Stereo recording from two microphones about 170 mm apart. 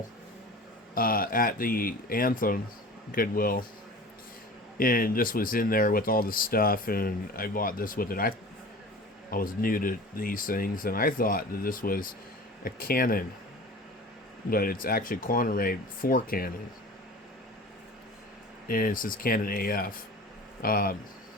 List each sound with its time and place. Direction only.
0.9 s speech: 55° left (ahead or behind)
4.8 s speech: 55° left (ahead or behind)
9.3 s speech: 55° left (ahead or behind)
14.5 s speech: 60° left (ahead or behind)
18.7 s speech: 55° left (ahead or behind)